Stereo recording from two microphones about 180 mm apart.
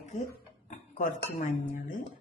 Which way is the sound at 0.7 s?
45° left (ahead or behind).